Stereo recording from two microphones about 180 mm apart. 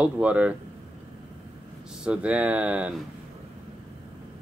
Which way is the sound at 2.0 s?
5° right (ahead or behind).